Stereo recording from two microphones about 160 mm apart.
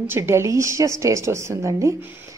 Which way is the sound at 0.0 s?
15° right (ahead or behind).